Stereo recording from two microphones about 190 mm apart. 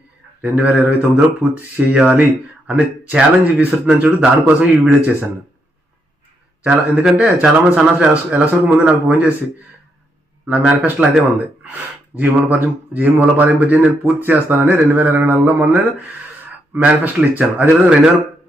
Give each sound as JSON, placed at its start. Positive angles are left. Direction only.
{"t": 0.4, "sound": "speech", "side_deg": -5}
{"t": 6.6, "sound": "speech", "side_deg": -5}
{"t": 10.4, "sound": "speech", "side_deg": -5}